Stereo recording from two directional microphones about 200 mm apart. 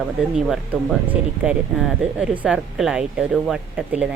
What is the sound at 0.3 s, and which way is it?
Speech, centre (ahead or behind).